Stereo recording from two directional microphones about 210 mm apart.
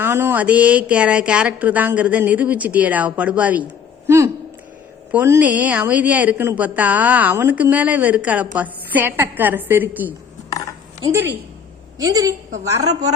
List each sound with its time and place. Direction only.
0.0 s speech: 10° right (ahead or behind)
12.6 s speech: 15° right (ahead or behind)